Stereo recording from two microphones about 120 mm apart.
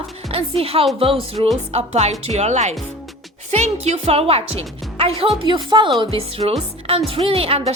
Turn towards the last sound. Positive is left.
turn(degrees=-55)  # may be behind; listen again after turning